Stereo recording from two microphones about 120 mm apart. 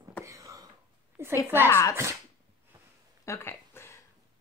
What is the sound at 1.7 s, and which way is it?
Speech, 25° left (ahead or behind).